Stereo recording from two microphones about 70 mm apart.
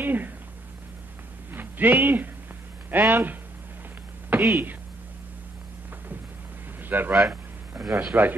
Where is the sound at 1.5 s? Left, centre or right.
Right.